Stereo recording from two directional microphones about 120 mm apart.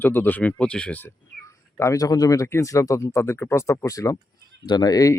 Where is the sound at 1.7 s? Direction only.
25° left (ahead or behind).